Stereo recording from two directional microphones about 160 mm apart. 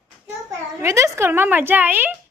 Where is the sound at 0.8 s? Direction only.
15° right (ahead or behind).